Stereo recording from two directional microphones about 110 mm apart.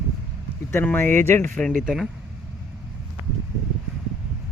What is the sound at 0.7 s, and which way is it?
Speech, 20° left (ahead or behind).